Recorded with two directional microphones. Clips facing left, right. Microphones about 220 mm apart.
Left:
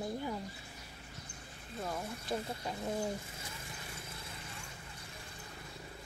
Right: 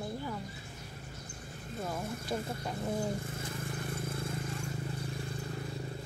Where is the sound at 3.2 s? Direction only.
55° right (ahead or behind).